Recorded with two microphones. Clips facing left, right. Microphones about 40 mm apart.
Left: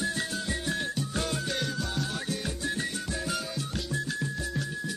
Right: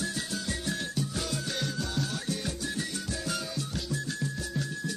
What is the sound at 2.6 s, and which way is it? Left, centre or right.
Music, left.